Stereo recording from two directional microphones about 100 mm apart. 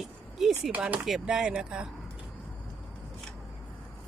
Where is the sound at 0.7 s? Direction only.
15° right (ahead or behind).